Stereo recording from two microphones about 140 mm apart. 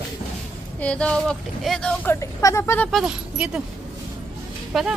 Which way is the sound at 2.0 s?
20° left (ahead or behind).